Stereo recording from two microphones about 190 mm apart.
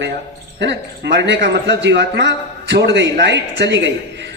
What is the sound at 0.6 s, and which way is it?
A man's voice, 65° right (ahead or behind).